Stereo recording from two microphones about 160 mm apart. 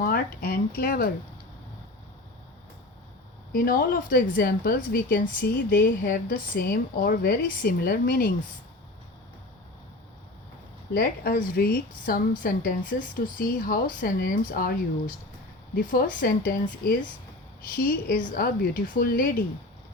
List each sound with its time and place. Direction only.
0.0 s speech: 65° left (ahead or behind)
3.5 s speech: 65° left (ahead or behind)
10.9 s speech: 70° left (ahead or behind)